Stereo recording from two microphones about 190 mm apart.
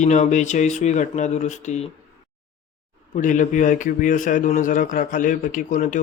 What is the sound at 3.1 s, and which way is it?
A man's voice, 40° left (ahead or behind).